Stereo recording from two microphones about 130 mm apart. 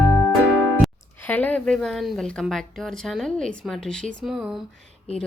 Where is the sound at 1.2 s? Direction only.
15° left (ahead or behind); by 4.6 s 5° right (ahead or behind).